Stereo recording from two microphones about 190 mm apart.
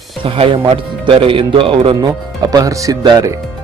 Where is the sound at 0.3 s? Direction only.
30° right (ahead or behind).